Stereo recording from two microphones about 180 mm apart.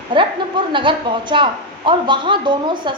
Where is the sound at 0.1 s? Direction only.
30° right (ahead or behind).